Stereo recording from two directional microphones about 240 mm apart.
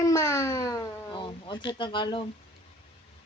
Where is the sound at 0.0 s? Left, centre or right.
Centre.